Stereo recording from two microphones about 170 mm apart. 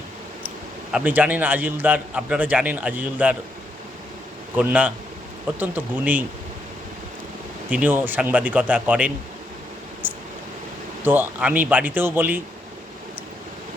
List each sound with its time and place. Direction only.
0.9 s a man's voice: 10° right (ahead or behind)
4.5 s a man's voice: 10° right (ahead or behind)
7.7 s a man's voice: 10° right (ahead or behind)
11.0 s a man's voice: 10° right (ahead or behind)